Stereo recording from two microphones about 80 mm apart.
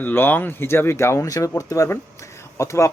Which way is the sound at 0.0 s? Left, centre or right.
Left.